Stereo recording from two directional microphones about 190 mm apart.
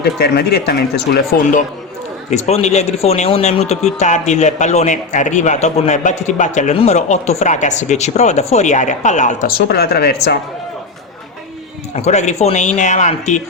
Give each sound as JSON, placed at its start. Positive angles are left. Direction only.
{"t": 0.0, "sound": "speech", "side_deg": 55}
{"t": 2.3, "sound": "a man's voice", "side_deg": 35}
{"t": 9.6, "sound": "speech", "side_deg": 55}
{"t": 11.9, "sound": "a man's voice", "side_deg": 35}